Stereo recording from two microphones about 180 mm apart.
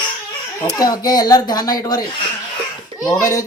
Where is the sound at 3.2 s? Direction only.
15° left (ahead or behind).